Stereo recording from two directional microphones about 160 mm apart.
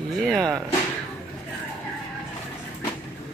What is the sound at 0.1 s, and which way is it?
Speech, centre (ahead or behind).